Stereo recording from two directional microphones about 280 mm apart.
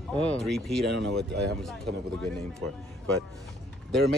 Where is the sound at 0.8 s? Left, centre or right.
Right.